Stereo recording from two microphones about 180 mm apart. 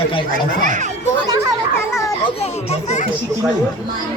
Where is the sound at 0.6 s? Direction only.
45° right (ahead or behind).